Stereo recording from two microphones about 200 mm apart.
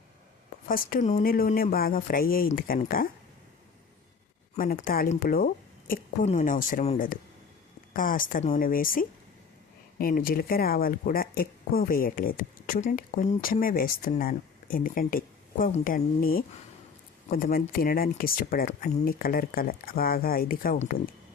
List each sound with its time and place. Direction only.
0.7 s speech: 40° left (ahead or behind)
4.5 s a woman's voice: 45° left (ahead or behind)